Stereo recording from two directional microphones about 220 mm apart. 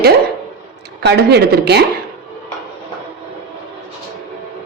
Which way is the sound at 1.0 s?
50° right (ahead or behind).